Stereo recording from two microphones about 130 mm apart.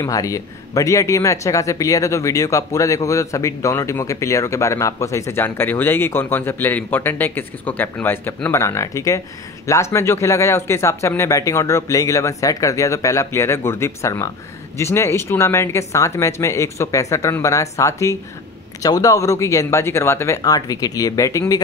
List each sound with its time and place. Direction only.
0.0 s a man's voice: 25° left (ahead or behind)